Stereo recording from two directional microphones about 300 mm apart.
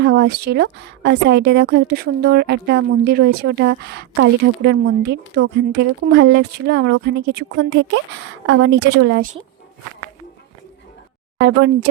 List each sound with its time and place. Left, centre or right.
0.0 s a woman's voice: right
11.3 s a woman's voice: right